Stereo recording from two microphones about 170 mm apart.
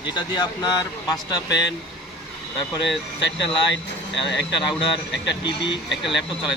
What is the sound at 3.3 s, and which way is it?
Speech, 90° left.